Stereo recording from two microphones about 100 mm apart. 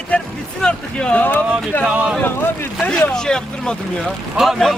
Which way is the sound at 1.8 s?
10° right (ahead or behind).